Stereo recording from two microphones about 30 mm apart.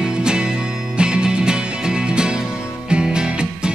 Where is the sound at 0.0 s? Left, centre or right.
Right.